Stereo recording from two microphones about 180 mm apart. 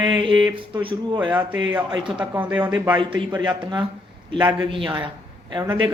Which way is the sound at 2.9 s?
25° right (ahead or behind).